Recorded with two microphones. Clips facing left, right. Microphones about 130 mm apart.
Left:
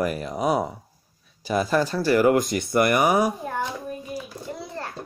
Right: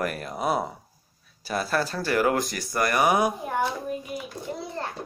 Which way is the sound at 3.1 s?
10° right (ahead or behind).